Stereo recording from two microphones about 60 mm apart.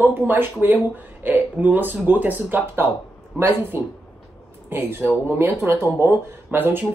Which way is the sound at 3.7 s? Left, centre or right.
Right.